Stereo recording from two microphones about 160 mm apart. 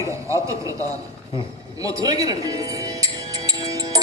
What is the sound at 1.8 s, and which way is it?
Music, 20° right (ahead or behind).